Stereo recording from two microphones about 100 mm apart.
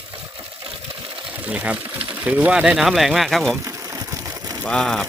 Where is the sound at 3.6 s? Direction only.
30° right (ahead or behind).